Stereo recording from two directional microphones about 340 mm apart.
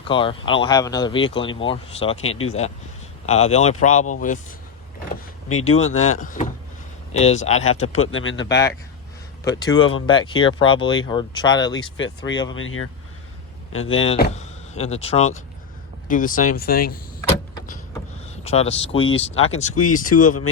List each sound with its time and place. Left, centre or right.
0.1 s speech: centre
2.2 s speech: left
3.2 s speech: centre
5.5 s speech: left
6.1 s speech: left
8.0 s speech: left
8.4 s speech: centre
11.9 s speech: left
13.9 s speech: centre
17.2 s vehicle: centre
18.4 s speech: centre
20.2 s speech: left